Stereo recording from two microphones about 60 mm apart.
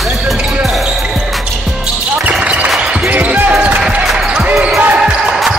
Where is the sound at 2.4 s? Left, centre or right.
Right.